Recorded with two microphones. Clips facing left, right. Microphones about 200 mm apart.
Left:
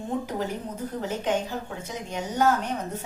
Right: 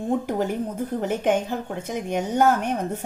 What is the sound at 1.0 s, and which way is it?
A woman's voice, 55° right (ahead or behind).